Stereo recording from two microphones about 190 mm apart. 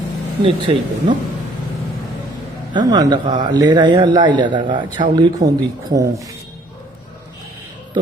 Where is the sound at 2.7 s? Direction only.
20° right (ahead or behind).